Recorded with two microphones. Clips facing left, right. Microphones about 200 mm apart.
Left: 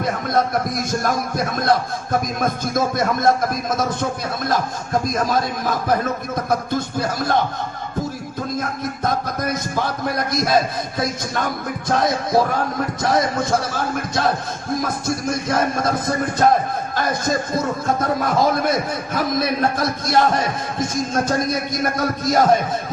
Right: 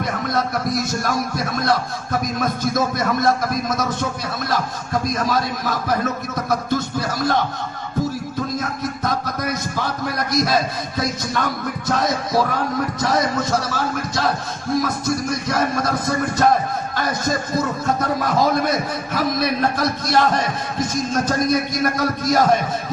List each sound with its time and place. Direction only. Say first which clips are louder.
0.3 s a man's voice: left 2 dB; 50° left (ahead or behind)
5.0 s a man's voice: right 1 dB; 50° left (ahead or behind)
8.5 s a man's voice: even; 50° left (ahead or behind)